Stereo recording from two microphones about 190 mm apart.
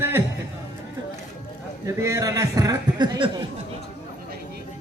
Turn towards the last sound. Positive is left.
turn(degrees=-20)  # may be behind; listen again after turning